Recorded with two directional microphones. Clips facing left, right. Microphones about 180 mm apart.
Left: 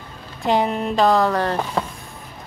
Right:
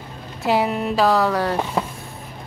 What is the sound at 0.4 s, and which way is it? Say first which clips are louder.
Speech: even; 5° right (ahead or behind).